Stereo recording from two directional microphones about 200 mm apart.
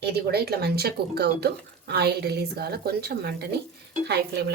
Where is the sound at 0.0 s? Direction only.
55° right (ahead or behind).